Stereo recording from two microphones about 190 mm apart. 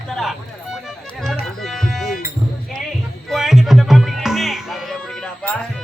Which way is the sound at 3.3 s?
Centre (ahead or behind).